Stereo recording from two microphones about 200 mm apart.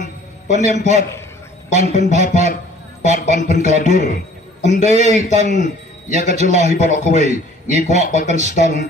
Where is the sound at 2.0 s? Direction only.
35° right (ahead or behind).